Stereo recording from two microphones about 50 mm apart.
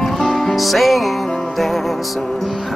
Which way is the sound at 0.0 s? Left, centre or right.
Centre.